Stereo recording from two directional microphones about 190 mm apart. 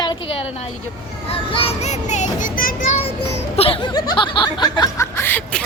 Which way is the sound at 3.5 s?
30° left (ahead or behind).